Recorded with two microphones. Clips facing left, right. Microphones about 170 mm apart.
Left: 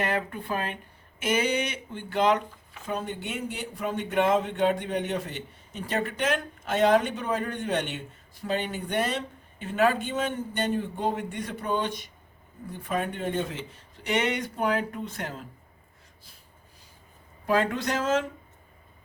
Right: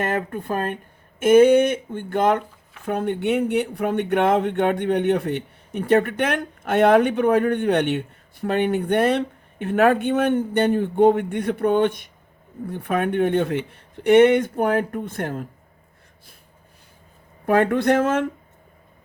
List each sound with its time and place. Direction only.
0.0 s a sound: 45° right (ahead or behind)
2.8 s speech: 60° right (ahead or behind)
17.4 s speech: 55° right (ahead or behind)